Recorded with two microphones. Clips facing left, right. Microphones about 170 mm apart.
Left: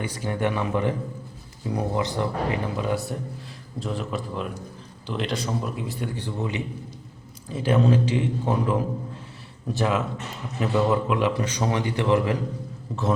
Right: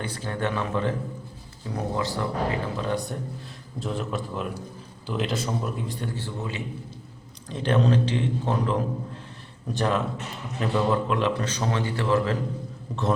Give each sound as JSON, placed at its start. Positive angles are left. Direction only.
{"t": 0.0, "sound": "a man's voice", "side_deg": 10}
{"t": 6.1, "sound": "a man's voice", "side_deg": 15}
{"t": 7.4, "sound": "a man's voice", "side_deg": 5}